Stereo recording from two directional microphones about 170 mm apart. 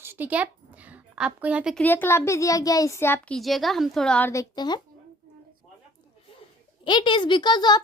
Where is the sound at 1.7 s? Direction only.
10° left (ahead or behind).